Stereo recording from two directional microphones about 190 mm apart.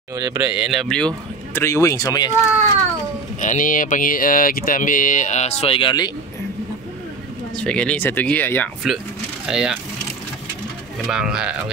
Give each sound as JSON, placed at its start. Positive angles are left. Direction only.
{"t": 0.1, "sound": "speech", "side_deg": -20}
{"t": 0.5, "sound": "speech", "side_deg": 0}
{"t": 3.3, "sound": "speech", "side_deg": 40}
{"t": 7.5, "sound": "speech", "side_deg": 5}
{"t": 8.8, "sound": "speech", "side_deg": 0}
{"t": 11.1, "sound": "speech", "side_deg": -5}